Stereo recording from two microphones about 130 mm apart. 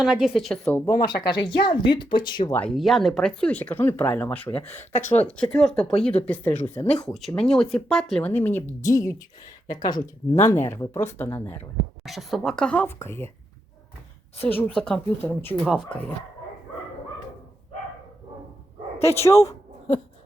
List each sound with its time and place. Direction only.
0.0 s a woman's voice: 5° right (ahead or behind)
1.0 s speech: 35° left (ahead or behind)
2.5 s speech: 10° left (ahead or behind)
2.7 s speech: centre (ahead or behind); by 9.2 s 25° left (ahead or behind)
10.3 s speech: 20° left (ahead or behind)
12.0 s a woman's voice: centre (ahead or behind); by 13.3 s 20° left (ahead or behind)
14.4 s a woman's voice: 15° left (ahead or behind)
15.2 s speech: 15° left (ahead or behind)
15.5 s a woman's voice: centre (ahead or behind)
15.9 s speech: 10° left (ahead or behind)
18.9 s speech: 20° left (ahead or behind)